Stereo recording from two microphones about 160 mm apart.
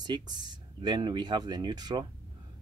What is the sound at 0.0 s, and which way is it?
Speech, 25° right (ahead or behind).